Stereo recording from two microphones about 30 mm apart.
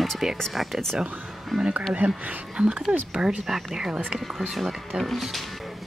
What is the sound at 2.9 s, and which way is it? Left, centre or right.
Speech, right.